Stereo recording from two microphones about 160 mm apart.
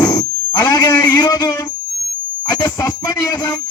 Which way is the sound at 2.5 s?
25° left (ahead or behind).